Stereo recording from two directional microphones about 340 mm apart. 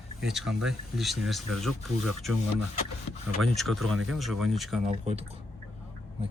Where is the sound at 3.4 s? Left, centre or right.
Centre.